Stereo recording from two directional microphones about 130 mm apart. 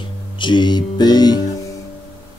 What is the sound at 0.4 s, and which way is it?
Music, 35° left (ahead or behind).